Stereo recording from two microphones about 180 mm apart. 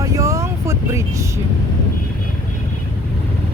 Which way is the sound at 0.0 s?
15° right (ahead or behind).